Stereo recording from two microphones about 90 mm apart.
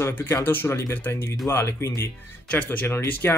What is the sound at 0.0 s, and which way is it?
Speech, 25° left (ahead or behind).